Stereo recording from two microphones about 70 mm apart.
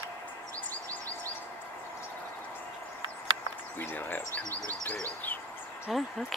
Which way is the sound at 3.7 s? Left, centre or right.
Left.